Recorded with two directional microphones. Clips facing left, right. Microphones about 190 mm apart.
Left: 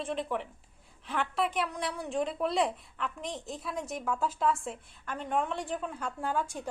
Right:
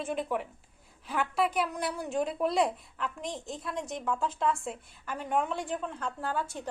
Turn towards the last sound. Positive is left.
turn(degrees=10)  # may be behind; listen again after turning